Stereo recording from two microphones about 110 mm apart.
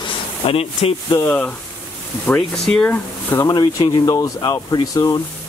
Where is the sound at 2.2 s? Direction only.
5° left (ahead or behind).